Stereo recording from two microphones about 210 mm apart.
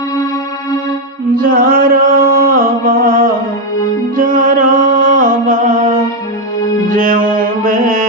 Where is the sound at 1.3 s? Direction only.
40° right (ahead or behind).